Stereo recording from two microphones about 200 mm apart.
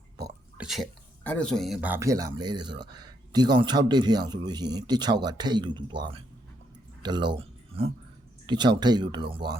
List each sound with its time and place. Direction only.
0.5 s speech: 5° right (ahead or behind); by 9.6 s 25° right (ahead or behind)